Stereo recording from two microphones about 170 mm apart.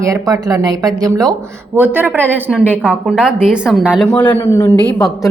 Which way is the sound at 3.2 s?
5° right (ahead or behind).